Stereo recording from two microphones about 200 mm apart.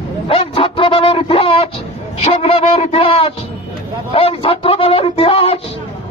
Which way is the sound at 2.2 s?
30° left (ahead or behind).